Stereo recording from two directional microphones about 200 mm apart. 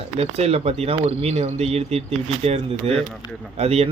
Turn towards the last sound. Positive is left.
turn(degrees=-30)  # may be behind; listen again after turning